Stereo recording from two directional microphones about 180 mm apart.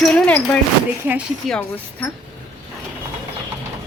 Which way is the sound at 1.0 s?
10° right (ahead or behind).